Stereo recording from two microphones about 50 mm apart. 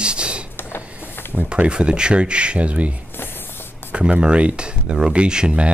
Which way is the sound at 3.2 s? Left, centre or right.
Left.